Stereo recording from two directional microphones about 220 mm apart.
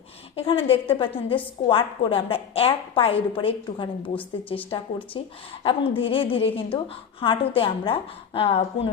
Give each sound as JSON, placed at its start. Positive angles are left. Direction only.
{"t": 0.3, "sound": "a woman's voice", "side_deg": 25}